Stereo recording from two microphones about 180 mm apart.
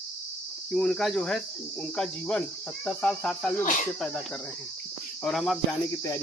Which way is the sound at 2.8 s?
5° left (ahead or behind).